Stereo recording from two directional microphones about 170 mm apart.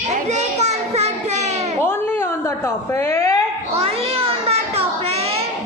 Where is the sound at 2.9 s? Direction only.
15° left (ahead or behind).